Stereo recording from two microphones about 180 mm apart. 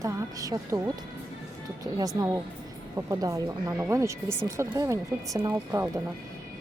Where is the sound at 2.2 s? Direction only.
15° right (ahead or behind).